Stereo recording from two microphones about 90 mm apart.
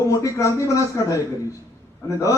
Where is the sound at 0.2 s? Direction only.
35° left (ahead or behind).